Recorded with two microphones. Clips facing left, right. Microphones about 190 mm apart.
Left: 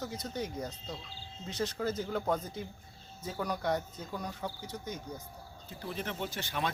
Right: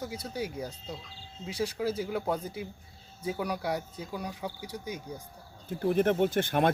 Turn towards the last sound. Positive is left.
turn(degrees=-55)  # may be behind; listen again after turning